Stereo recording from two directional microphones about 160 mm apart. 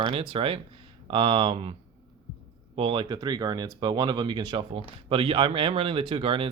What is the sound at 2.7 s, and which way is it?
Speech, 35° right (ahead or behind).